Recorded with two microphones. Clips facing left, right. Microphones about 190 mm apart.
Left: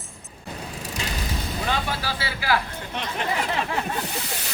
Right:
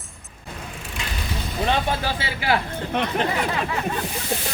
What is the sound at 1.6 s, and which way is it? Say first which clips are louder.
Speech: right 6 dB; 25° right (ahead or behind).